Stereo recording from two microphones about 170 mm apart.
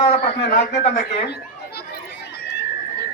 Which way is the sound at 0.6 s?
75° left (ahead or behind).